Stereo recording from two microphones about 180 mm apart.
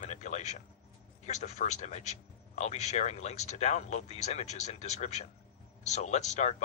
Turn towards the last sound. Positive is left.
turn(degrees=40)  # may be behind; listen again after turning